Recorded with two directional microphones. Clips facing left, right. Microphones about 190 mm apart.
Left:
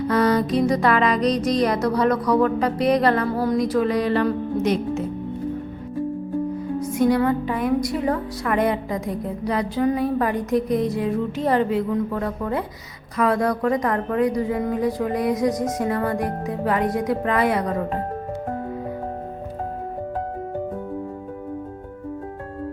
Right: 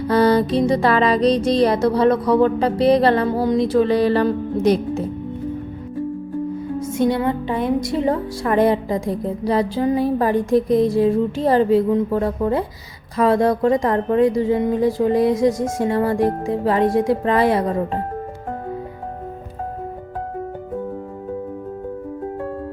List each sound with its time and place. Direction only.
0.1 s a woman's voice: 30° right (ahead or behind)
6.9 s a woman's voice: 25° right (ahead or behind)